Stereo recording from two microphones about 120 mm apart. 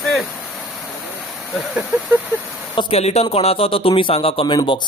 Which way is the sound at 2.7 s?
55° left (ahead or behind).